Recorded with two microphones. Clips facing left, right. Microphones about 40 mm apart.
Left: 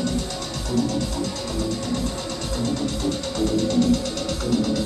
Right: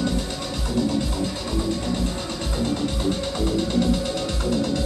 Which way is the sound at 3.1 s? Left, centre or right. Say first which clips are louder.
Left 1 dB; centre.